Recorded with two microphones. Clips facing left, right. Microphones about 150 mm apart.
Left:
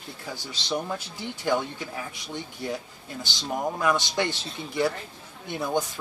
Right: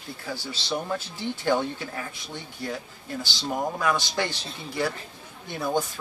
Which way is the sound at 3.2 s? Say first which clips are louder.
Even; 20° left (ahead or behind).